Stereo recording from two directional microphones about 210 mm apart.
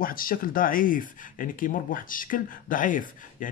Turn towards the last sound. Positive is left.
turn(degrees=40)  # may be behind; listen again after turning